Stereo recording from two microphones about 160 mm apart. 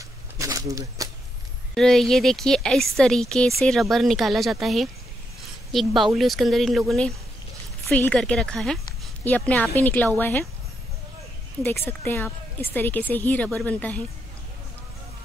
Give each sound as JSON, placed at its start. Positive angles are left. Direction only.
{"t": 0.4, "sound": "a sound", "side_deg": -20}
{"t": 1.8, "sound": "a woman's voice", "side_deg": 0}
{"t": 11.6, "sound": "a woman's voice", "side_deg": 15}